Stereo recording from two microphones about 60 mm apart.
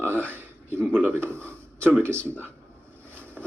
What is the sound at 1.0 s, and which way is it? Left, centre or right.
Speech, right.